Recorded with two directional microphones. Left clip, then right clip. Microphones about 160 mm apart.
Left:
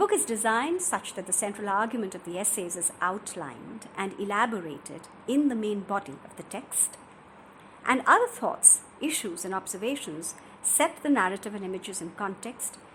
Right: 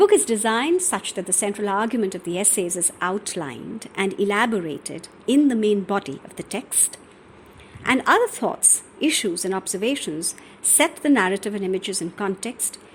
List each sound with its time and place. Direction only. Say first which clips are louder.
0.0 s a woman's voice: right 9 dB; 30° right (ahead or behind)
7.9 s a woman's voice: right 4 dB; 35° right (ahead or behind)